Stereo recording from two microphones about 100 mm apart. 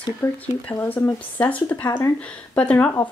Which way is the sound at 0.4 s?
15° left (ahead or behind).